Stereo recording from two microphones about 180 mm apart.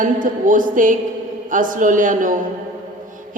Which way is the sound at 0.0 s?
45° right (ahead or behind).